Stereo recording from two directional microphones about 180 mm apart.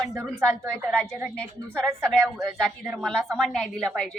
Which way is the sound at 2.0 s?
15° right (ahead or behind).